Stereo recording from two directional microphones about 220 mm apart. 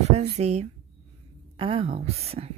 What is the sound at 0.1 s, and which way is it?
A woman's voice, 30° right (ahead or behind).